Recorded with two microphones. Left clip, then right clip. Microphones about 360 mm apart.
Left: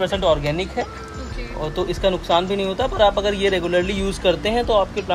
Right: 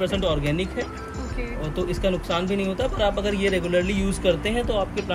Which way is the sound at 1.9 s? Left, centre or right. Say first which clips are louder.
Left 6 dB; centre.